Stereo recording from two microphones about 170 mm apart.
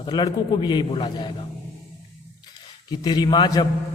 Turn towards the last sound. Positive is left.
turn(degrees=25)  # may be behind; listen again after turning